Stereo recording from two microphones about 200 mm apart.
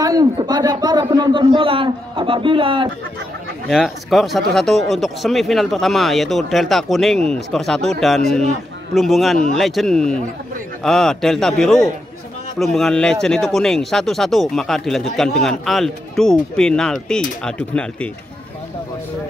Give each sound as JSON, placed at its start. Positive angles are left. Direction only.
{"t": 0.0, "sound": "a man's voice", "side_deg": -20}
{"t": 3.6, "sound": "speech", "side_deg": 0}